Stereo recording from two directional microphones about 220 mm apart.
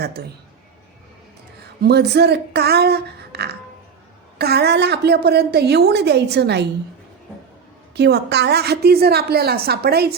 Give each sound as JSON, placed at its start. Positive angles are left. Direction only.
{"t": 0.2, "sound": "a woman's voice", "side_deg": -50}
{"t": 1.8, "sound": "a woman's voice", "side_deg": -50}
{"t": 7.9, "sound": "a woman's voice", "side_deg": -50}